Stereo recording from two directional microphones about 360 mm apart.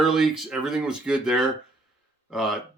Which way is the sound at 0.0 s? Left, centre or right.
Centre.